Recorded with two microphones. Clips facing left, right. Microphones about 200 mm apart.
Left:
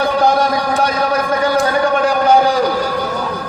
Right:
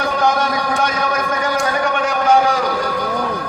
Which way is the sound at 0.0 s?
35° left (ahead or behind).